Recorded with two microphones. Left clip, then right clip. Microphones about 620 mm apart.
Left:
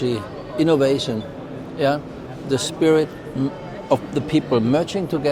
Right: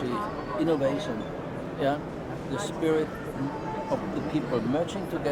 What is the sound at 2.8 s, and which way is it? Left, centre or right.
Speech, left.